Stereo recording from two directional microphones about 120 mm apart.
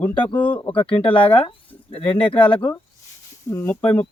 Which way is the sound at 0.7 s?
45° left (ahead or behind).